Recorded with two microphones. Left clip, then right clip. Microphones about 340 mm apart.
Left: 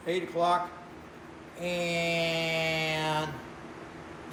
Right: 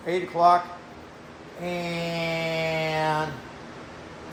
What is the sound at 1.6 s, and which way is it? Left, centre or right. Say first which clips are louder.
Mantra: even; centre.